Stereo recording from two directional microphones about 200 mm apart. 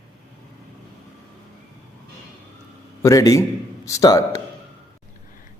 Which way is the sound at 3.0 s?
15° left (ahead or behind).